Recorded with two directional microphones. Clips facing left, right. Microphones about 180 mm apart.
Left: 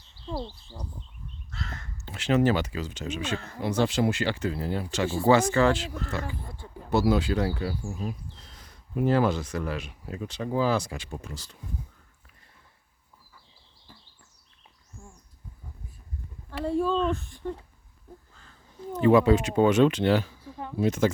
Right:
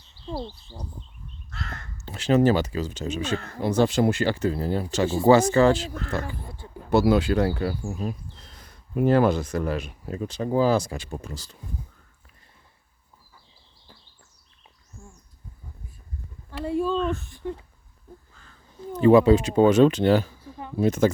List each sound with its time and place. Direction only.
0.3 s bird: 15° right (ahead or behind)
1.5 s crow: 60° right (ahead or behind)
2.0 s speech: 40° right (ahead or behind)
6.0 s speech: 50° right (ahead or behind)
6.4 s a sound: 5° right (ahead or behind)
6.9 s speech: 70° right (ahead or behind); by 11.5 s 35° right (ahead or behind)
16.6 s speech: 5° right (ahead or behind)
18.9 s speech: 35° right (ahead or behind)